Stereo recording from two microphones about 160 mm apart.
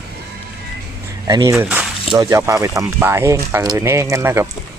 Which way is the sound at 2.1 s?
20° right (ahead or behind).